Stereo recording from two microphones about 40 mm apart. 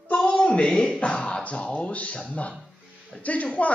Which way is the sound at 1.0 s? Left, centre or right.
Left.